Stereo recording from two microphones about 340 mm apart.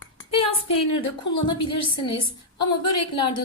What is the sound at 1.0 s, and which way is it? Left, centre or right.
Speech, centre.